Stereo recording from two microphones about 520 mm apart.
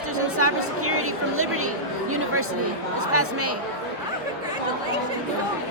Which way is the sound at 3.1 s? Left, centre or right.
Right.